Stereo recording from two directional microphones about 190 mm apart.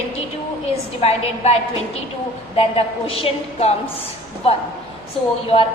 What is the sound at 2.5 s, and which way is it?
A woman's voice, 30° left (ahead or behind).